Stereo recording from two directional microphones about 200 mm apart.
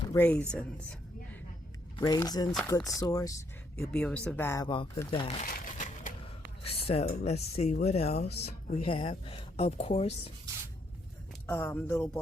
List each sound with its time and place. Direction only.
0.1 s speech: 10° left (ahead or behind)
0.5 s a sound: 5° left (ahead or behind)
2.0 s speech: 20° left (ahead or behind)
3.8 s speech: 5° left (ahead or behind); by 5.5 s 30° left (ahead or behind)
5.5 s crumpling: 45° left (ahead or behind)
6.6 s music: 30° left (ahead or behind)
7.1 s speech: 35° left (ahead or behind)
11.4 s speech: 10° left (ahead or behind)